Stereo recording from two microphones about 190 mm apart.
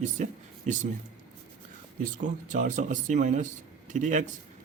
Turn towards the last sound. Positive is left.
turn(degrees=-40)  # may be behind; listen again after turning